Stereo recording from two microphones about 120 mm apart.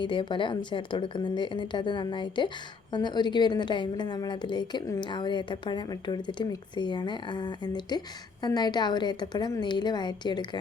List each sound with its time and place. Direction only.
0.0 s a woman's voice: 40° left (ahead or behind)